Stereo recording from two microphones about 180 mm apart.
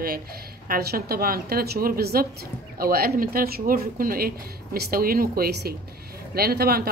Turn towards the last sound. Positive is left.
turn(degrees=-60)  # may be behind; listen again after turning